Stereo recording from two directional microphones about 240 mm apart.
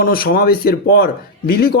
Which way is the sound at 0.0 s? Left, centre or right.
Left.